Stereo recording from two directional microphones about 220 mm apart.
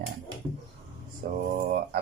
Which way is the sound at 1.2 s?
30° right (ahead or behind).